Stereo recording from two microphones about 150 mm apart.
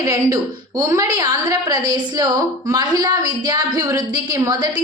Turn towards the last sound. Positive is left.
turn(degrees=-25)  # may be behind; listen again after turning